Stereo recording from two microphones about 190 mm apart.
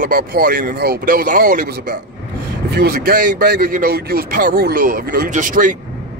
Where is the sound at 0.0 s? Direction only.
50° right (ahead or behind).